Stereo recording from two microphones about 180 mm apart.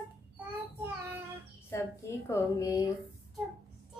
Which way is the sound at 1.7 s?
15° left (ahead or behind).